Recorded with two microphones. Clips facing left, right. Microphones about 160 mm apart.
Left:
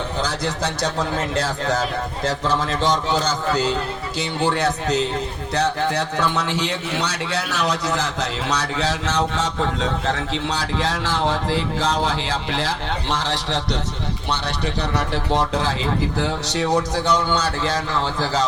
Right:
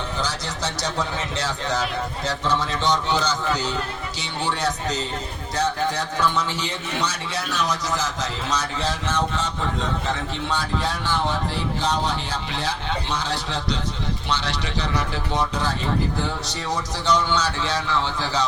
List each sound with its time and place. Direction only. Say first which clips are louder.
0.3 s a man's voice: left 5 dB; 55° left (ahead or behind)
4.2 s a man's voice: left 5 dB; 55° left (ahead or behind); by 12.6 s 90° left
14.6 s a man's voice: left 3 dB; 70° left (ahead or behind)
16.5 s a man's voice: left 7 dB; 65° left (ahead or behind); by 18.4 s 45° left (ahead or behind)